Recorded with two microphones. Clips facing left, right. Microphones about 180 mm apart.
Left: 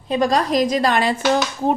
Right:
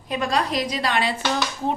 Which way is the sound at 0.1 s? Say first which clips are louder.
Left 6 dB; 40° left (ahead or behind).